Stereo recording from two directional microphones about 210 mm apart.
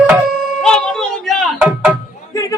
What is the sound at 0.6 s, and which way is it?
Music, centre (ahead or behind).